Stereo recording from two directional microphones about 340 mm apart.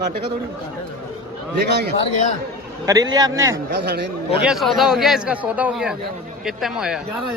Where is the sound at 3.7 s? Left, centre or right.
Right.